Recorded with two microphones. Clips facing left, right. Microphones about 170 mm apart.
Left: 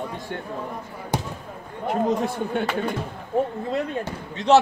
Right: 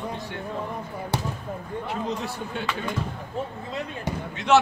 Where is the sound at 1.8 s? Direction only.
50° left (ahead or behind).